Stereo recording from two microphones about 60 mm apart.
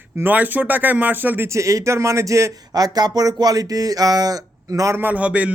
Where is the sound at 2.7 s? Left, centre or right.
Right.